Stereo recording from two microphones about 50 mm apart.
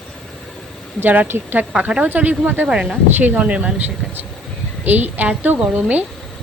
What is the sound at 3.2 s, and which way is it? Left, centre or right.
Speech, right.